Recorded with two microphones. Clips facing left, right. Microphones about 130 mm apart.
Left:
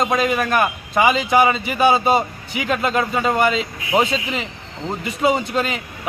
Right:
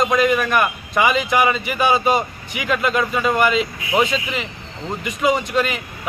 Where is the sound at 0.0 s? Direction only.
30° left (ahead or behind).